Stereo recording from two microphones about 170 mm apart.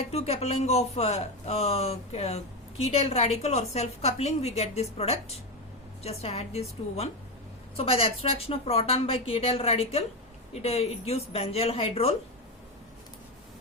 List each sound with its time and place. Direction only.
0.1 s speech: 40° left (ahead or behind)